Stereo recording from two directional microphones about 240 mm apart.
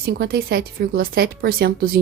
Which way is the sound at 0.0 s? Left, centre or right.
Right.